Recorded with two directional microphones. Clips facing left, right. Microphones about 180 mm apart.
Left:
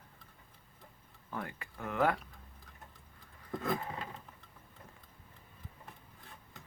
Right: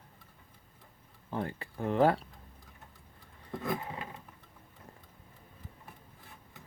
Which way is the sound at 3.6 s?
10° right (ahead or behind).